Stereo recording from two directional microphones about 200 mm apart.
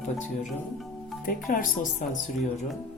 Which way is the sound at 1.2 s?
45° left (ahead or behind).